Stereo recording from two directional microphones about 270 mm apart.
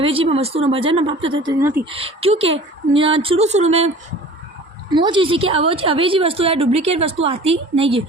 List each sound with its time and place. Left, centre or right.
0.0 s a woman's voice: centre
1.9 s a woman's voice: right